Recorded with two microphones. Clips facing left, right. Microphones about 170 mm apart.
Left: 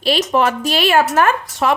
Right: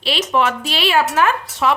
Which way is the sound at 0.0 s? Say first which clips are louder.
Left 3 dB; 45° left (ahead or behind).